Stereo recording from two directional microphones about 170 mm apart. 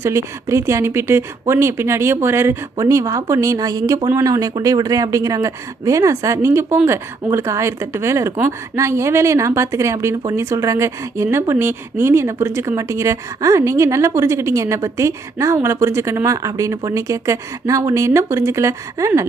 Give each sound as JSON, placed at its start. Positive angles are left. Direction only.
{"t": 0.0, "sound": "speech", "side_deg": -15}